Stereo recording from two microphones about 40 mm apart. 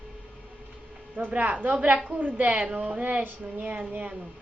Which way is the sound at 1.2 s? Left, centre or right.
Right.